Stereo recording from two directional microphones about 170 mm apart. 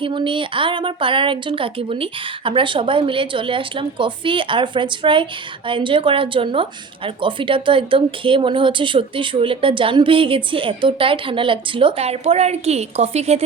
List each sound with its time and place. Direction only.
0.0 s speech: 30° right (ahead or behind)